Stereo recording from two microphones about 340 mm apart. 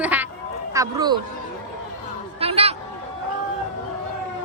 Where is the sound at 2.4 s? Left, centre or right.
Centre.